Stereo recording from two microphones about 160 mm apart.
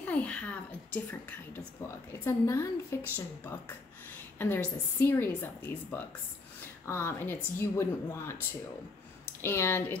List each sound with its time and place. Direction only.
0.0 s a woman's voice: 10° left (ahead or behind)
4.4 s a woman's voice: 15° left (ahead or behind)
9.4 s a woman's voice: 15° left (ahead or behind)